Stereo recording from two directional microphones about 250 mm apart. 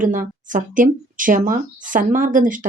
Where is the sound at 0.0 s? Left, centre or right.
Right.